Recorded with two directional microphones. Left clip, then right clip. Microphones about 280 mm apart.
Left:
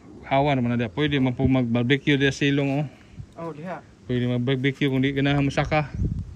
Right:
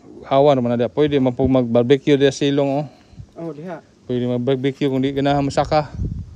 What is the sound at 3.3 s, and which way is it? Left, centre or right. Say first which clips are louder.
Speech: right 3 dB; right.